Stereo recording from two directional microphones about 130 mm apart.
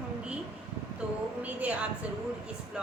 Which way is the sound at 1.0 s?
5° right (ahead or behind).